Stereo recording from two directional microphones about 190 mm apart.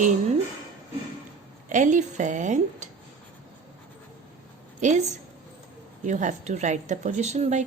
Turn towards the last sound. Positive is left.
turn(degrees=-35)  # may be behind; listen again after turning